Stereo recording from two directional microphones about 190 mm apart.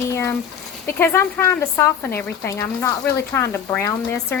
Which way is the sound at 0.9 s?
10° left (ahead or behind).